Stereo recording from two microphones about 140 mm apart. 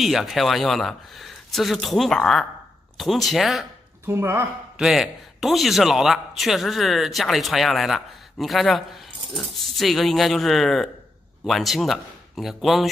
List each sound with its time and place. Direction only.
0.0 s a man's voice: centre (ahead or behind)
4.1 s speech: 15° right (ahead or behind)
4.7 s a man's voice: centre (ahead or behind)